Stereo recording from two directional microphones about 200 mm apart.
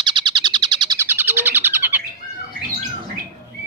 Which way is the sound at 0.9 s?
10° right (ahead or behind).